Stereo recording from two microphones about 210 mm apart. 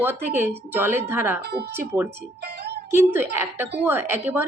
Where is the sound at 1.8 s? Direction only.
10° right (ahead or behind).